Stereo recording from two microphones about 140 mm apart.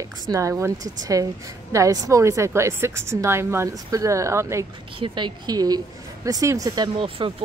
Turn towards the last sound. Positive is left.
turn(degrees=-40)  # may be behind; listen again after turning